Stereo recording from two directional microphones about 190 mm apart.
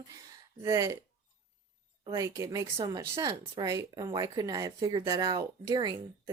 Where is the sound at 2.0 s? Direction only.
20° right (ahead or behind).